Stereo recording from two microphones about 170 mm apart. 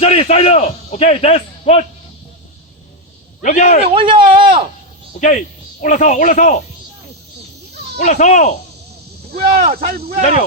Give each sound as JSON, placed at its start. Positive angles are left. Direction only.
{"t": 0.0, "sound": "a man's voice", "side_deg": 35}
{"t": 3.4, "sound": "speech", "side_deg": 50}
{"t": 3.8, "sound": "speech", "side_deg": -30}
{"t": 5.2, "sound": "speech", "side_deg": 45}
{"t": 7.9, "sound": "speech", "side_deg": 45}
{"t": 9.3, "sound": "speech", "side_deg": -65}
{"t": 10.2, "sound": "speech", "side_deg": 45}